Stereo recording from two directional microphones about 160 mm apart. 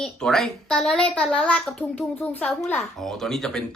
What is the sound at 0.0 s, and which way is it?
Speech, 5° left (ahead or behind).